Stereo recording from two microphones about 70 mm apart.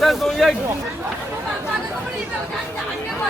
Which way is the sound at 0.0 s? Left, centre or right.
Centre.